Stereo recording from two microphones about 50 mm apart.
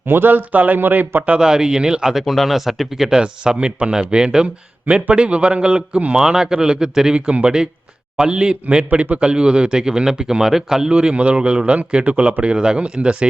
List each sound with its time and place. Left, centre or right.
0.1 s speech: right
1.4 s speech: centre
2.1 s speech: centre
3.2 s a man's voice: centre